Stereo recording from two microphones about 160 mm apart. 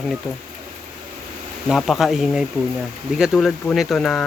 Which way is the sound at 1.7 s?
Centre (ahead or behind).